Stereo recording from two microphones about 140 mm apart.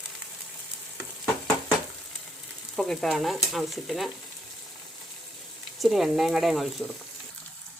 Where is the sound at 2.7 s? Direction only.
5° left (ahead or behind).